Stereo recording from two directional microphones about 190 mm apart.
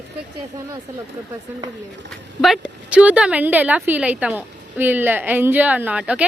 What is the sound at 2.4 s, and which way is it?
A woman's voice, 5° right (ahead or behind).